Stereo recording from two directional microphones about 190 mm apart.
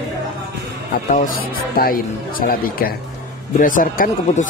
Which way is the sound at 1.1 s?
45° left (ahead or behind).